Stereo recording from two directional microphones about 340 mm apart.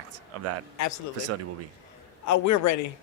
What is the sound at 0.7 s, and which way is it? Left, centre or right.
Speech, left.